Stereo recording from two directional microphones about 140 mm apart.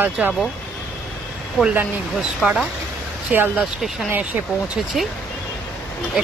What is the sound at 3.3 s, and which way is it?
Speech, 15° right (ahead or behind).